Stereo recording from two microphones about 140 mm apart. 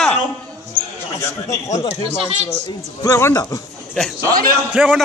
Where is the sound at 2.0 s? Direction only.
45° right (ahead or behind).